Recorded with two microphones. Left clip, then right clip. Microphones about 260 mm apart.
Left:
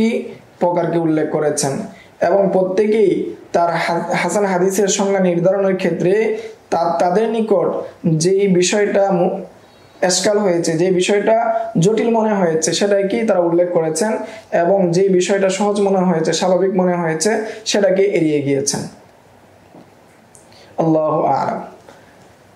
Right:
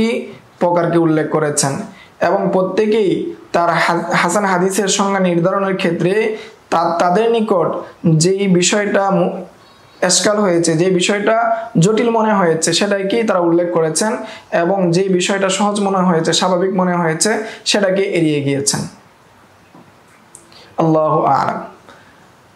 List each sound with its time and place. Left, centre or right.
0.0 s a woman's voice: right
20.8 s a woman's voice: right